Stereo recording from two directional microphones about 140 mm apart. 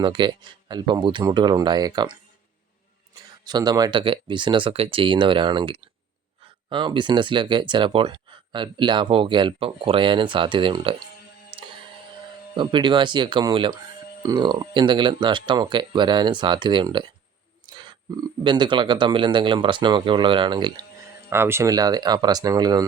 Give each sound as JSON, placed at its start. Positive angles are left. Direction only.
{"t": 0.0, "sound": "speech", "side_deg": -35}
{"t": 3.4, "sound": "speech", "side_deg": -30}
{"t": 11.5, "sound": "music", "side_deg": -40}
{"t": 12.5, "sound": "speech", "side_deg": -35}
{"t": 21.2, "sound": "speech", "side_deg": -15}